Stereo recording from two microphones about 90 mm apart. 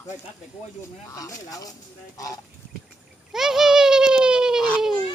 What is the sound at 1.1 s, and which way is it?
Speech, 40° left (ahead or behind).